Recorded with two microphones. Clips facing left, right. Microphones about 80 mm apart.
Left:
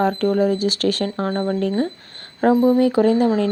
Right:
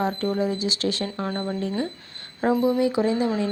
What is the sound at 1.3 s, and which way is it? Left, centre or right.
Speech, left.